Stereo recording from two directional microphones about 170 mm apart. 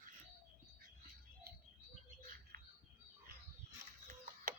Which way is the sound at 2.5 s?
60° right (ahead or behind).